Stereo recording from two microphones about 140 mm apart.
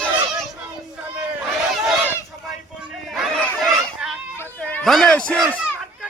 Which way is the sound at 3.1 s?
5° left (ahead or behind).